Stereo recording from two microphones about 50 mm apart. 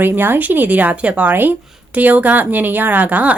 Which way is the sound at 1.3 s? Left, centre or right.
Right.